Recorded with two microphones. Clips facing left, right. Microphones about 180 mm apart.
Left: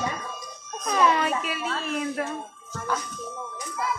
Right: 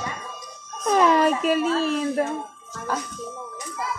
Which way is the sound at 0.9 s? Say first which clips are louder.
Right 5 dB; 40° right (ahead or behind).